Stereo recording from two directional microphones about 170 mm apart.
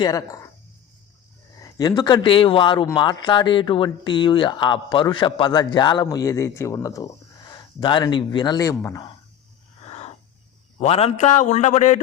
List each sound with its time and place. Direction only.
0.0 s speech: 20° left (ahead or behind)
1.6 s speech: 25° left (ahead or behind)
9.8 s owl: 40° left (ahead or behind)
10.8 s a man's voice: 35° left (ahead or behind)